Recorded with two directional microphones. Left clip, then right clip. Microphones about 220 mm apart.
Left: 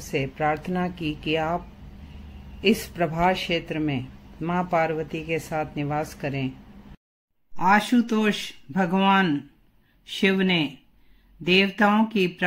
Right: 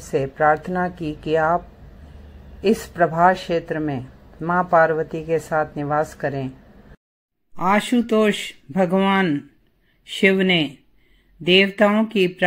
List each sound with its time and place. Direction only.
0.4 s a man's voice: centre (ahead or behind)
2.8 s a man's voice: 5° left (ahead or behind)
7.5 s a man's voice: centre (ahead or behind)